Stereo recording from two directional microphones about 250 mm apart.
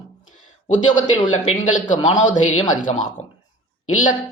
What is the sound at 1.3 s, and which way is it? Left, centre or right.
Speech, left.